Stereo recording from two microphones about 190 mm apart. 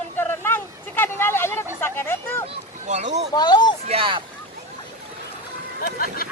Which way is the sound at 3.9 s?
25° right (ahead or behind).